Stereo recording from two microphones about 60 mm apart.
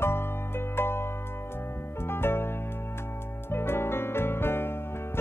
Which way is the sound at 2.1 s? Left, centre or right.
Left.